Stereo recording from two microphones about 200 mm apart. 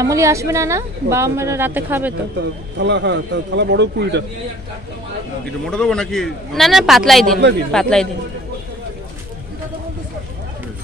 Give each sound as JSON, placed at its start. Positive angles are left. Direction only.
{"t": 0.0, "sound": "speech", "side_deg": -15}
{"t": 2.8, "sound": "speech", "side_deg": -65}
{"t": 5.7, "sound": "a man's voice", "side_deg": 5}
{"t": 7.3, "sound": "speech", "side_deg": -60}
{"t": 7.7, "sound": "a man's voice", "side_deg": 5}